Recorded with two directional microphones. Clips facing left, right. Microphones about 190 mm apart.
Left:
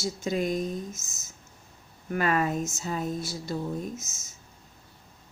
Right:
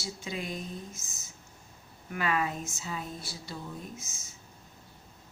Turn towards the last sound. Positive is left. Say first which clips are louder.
# left 7 dB
turn(degrees=45)  # may be behind; listen again after turning